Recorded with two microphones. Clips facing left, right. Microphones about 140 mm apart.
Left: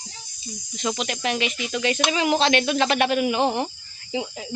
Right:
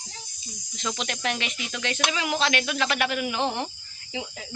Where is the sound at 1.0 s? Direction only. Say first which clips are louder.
Left 3 dB; 5° left (ahead or behind).